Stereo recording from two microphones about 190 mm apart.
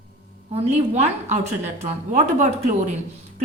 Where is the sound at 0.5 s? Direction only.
35° right (ahead or behind).